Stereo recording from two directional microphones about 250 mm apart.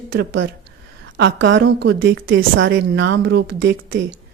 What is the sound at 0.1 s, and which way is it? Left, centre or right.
A woman's voice, right.